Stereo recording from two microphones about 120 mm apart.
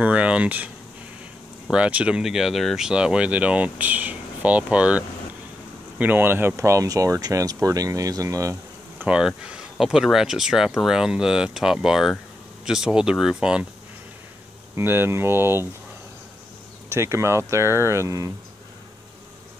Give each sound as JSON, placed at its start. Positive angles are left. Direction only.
{"t": 0.0, "sound": "speech", "side_deg": -10}
{"t": 1.7, "sound": "speech", "side_deg": -10}
{"t": 9.0, "sound": "speech", "side_deg": -10}
{"t": 14.8, "sound": "speech", "side_deg": -20}
{"t": 16.9, "sound": "speech", "side_deg": -25}